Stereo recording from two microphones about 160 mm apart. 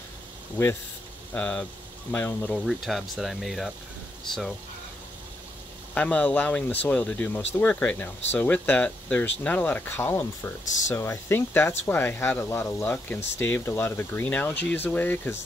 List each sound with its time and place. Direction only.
0.6 s speech: 15° left (ahead or behind)
5.9 s speech: 10° left (ahead or behind)